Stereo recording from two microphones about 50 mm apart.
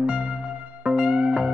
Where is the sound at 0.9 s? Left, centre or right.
Centre.